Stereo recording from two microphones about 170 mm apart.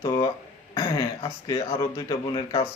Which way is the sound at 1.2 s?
25° left (ahead or behind).